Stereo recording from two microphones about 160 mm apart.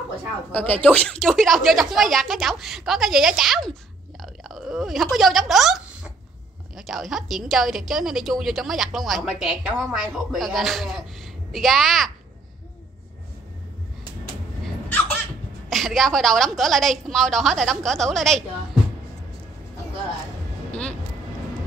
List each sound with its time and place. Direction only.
0.5 s a woman's voice: 10° left (ahead or behind)
6.9 s a woman's voice: centre (ahead or behind)
15.7 s a woman's voice: centre (ahead or behind)